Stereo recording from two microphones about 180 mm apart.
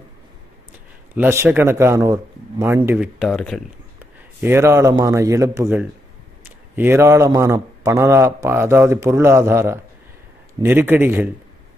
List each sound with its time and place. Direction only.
1.1 s a man's voice: 10° right (ahead or behind)
3.2 s speech: centre (ahead or behind)
4.0 s a man's voice: 10° right (ahead or behind)